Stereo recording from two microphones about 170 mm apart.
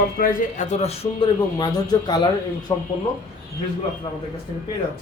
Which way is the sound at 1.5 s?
25° left (ahead or behind).